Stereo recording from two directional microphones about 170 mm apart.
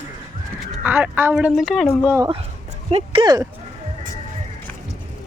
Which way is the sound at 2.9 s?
35° right (ahead or behind).